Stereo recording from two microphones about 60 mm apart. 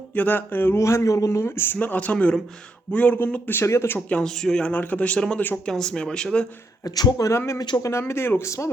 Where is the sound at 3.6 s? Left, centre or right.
Left.